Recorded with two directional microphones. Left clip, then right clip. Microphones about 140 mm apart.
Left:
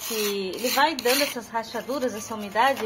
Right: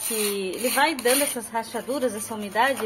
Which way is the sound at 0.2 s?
Centre (ahead or behind).